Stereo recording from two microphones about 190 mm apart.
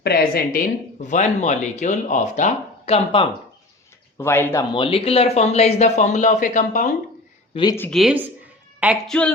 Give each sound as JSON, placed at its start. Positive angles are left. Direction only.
{"t": 0.0, "sound": "speech", "side_deg": 55}
{"t": 1.0, "sound": "speech", "side_deg": 40}
{"t": 4.2, "sound": "speech", "side_deg": 15}
{"t": 4.7, "sound": "speech", "side_deg": 30}
{"t": 7.5, "sound": "speech", "side_deg": 20}
{"t": 7.8, "sound": "speech", "side_deg": 0}